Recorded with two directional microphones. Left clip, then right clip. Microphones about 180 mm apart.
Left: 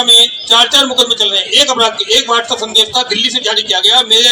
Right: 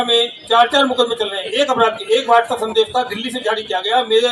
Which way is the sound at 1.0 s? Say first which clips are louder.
Left 7 dB; 55° right (ahead or behind).